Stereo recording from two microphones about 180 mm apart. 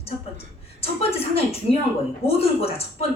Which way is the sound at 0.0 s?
35° left (ahead or behind).